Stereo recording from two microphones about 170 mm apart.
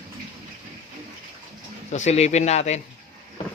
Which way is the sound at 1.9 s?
40° left (ahead or behind).